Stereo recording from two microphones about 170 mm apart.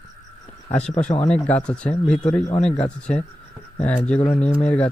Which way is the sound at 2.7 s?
40° left (ahead or behind).